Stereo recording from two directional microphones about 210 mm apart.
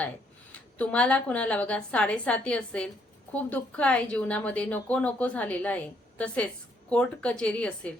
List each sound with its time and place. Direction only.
0.5 s a woman's voice: 5° left (ahead or behind)